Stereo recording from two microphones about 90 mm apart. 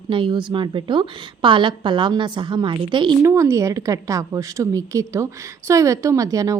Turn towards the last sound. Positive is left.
turn(degrees=-40)  # may be behind; listen again after turning